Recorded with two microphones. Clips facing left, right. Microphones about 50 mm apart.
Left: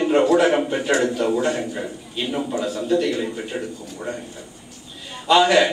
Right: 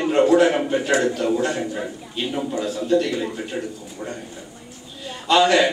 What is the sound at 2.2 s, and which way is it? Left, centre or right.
A man's voice, centre.